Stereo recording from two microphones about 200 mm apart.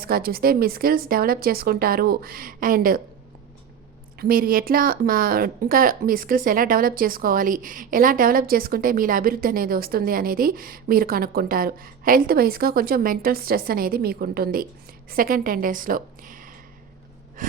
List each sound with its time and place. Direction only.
0.0 s a woman's voice: 50° right (ahead or behind)
4.2 s a woman's voice: 45° right (ahead or behind)